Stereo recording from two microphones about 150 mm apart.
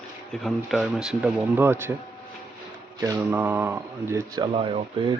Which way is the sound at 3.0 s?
25° right (ahead or behind).